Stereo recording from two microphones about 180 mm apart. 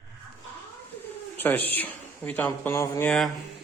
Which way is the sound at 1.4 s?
10° left (ahead or behind).